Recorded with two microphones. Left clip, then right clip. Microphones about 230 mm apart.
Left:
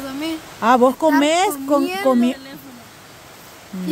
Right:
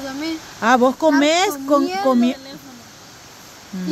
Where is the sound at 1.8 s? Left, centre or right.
Centre.